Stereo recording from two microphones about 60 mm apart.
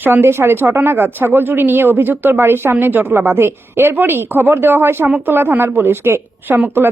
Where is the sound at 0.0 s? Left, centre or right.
Right.